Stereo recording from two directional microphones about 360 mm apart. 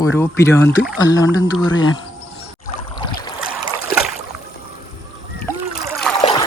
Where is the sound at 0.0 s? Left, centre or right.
Centre.